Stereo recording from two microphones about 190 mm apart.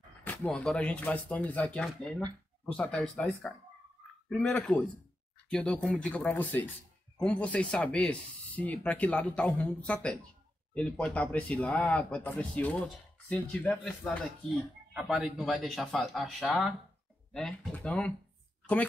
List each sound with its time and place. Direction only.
0.2 s a man's voice: 10° left (ahead or behind)
15.0 s a man's voice: 5° right (ahead or behind)